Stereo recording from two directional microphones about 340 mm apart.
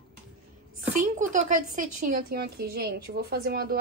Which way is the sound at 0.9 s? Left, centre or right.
Right.